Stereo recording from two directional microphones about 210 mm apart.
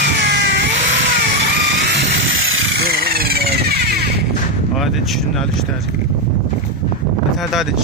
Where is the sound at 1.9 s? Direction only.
55° right (ahead or behind).